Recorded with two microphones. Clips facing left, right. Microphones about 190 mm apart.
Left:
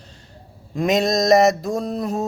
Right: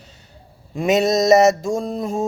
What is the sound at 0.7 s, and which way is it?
Speech, 5° right (ahead or behind).